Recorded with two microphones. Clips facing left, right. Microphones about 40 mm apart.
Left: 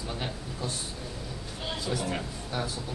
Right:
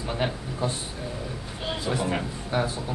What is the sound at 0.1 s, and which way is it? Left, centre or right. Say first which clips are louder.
A man's voice: right 10 dB; right.